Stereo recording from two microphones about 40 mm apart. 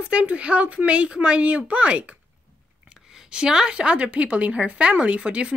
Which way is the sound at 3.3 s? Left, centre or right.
Centre.